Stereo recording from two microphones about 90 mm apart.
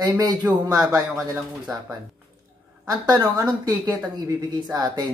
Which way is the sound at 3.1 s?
45° right (ahead or behind).